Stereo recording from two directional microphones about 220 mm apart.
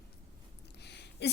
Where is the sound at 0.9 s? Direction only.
50° left (ahead or behind).